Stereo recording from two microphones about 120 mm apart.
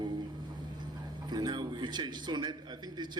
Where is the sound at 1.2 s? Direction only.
35° right (ahead or behind).